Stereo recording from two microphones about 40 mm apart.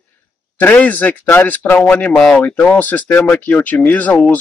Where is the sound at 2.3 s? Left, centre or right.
Left.